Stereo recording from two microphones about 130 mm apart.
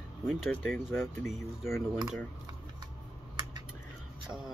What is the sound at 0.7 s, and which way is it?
Speech, 20° left (ahead or behind).